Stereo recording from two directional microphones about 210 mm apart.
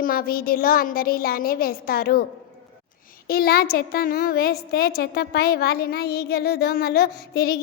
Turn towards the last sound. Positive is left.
turn(degrees=50)  # may be behind; listen again after turning